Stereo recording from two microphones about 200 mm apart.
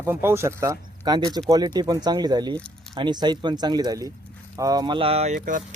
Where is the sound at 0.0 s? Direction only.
10° right (ahead or behind).